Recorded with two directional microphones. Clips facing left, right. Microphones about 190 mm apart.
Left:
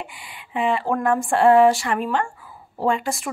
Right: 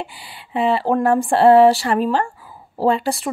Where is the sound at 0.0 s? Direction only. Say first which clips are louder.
Right 4 dB; 35° right (ahead or behind).